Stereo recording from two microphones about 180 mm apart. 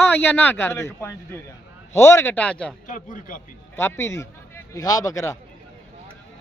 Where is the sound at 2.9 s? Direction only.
45° left (ahead or behind).